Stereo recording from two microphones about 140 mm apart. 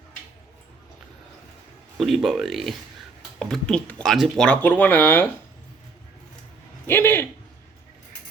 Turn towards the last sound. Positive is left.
turn(degrees=15)  # may be behind; listen again after turning